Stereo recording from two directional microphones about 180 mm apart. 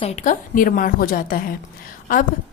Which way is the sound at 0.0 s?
40° left (ahead or behind).